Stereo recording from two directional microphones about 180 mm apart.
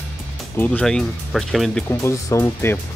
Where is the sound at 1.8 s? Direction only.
15° left (ahead or behind).